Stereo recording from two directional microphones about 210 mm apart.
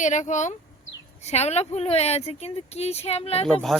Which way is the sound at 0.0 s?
35° left (ahead or behind).